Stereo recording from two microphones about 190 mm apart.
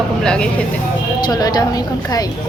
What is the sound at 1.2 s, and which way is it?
A woman's voice, 20° left (ahead or behind).